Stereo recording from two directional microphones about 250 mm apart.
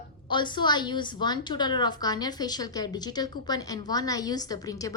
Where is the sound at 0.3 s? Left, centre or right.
Centre.